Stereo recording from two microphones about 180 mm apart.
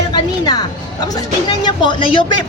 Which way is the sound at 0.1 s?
25° left (ahead or behind).